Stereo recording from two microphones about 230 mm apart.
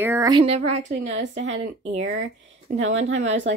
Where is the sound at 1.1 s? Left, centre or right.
Right.